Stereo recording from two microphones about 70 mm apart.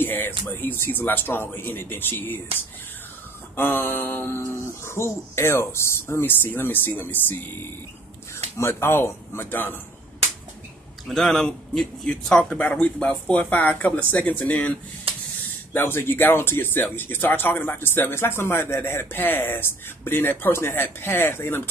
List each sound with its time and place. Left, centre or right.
0.0 s speech: left
3.5 s speech: left
8.5 s speech: left
11.1 s speech: centre
12.5 s speech: left
15.7 s speech: left